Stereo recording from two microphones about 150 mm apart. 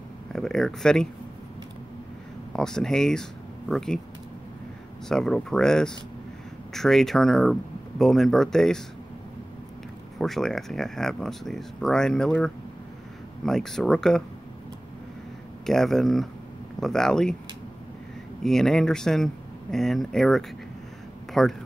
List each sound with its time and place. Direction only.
0.3 s speech: 5° left (ahead or behind)
2.5 s speech: 5° left (ahead or behind)
5.0 s speech: 5° left (ahead or behind)
10.1 s speech: centre (ahead or behind)
15.6 s speech: centre (ahead or behind)
18.4 s speech: 5° left (ahead or behind)